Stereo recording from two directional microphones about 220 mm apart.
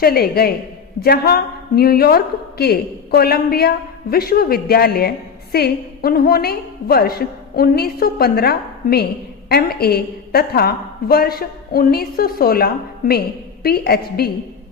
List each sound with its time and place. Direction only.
0.0 s a woman's voice: 45° left (ahead or behind)